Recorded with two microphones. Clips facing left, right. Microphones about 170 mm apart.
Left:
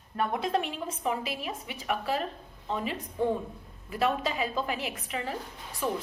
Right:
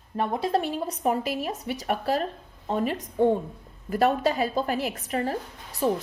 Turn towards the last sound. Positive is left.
turn(degrees=-40)  # may be behind; listen again after turning